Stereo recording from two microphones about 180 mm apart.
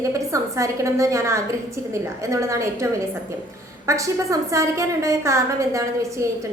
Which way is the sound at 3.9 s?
15° right (ahead or behind).